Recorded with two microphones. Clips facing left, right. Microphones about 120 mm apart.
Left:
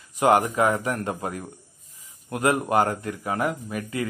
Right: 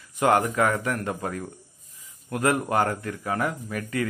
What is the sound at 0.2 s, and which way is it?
A man's voice, 20° left (ahead or behind).